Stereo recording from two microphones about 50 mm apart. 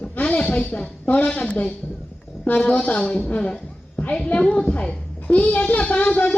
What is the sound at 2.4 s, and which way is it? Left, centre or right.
A woman's voice, left.